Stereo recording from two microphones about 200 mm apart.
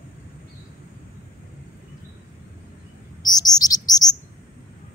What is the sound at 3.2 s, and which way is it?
Bird, 20° left (ahead or behind).